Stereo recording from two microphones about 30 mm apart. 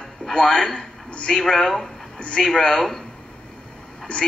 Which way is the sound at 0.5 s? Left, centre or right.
Left.